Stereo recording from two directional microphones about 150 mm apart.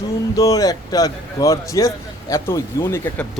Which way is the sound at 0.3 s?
25° left (ahead or behind).